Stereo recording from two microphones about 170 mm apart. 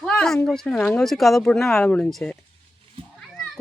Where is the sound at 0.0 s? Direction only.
5° left (ahead or behind).